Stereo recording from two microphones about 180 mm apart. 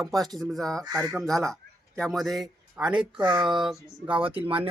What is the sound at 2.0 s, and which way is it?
Speech, centre (ahead or behind).